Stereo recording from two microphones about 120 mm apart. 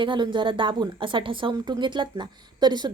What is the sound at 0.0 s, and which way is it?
A woman's voice, 40° right (ahead or behind).